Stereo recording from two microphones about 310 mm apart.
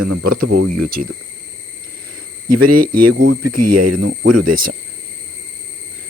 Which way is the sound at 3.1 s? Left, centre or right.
Right.